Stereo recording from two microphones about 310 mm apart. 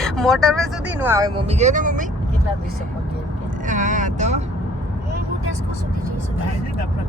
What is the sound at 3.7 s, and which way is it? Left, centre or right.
Vehicle, right.